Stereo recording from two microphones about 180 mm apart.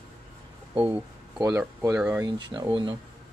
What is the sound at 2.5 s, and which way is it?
Speech, 25° right (ahead or behind).